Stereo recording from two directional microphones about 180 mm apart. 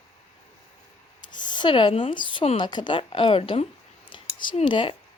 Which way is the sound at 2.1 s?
25° left (ahead or behind).